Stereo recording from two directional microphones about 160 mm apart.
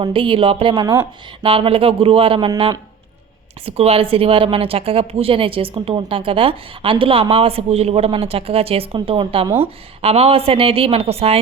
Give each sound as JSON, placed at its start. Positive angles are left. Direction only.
{"t": 0.0, "sound": "a woman's voice", "side_deg": -35}